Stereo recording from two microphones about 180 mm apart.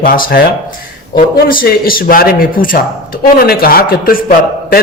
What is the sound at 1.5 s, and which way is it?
A man's voice, 55° left (ahead or behind).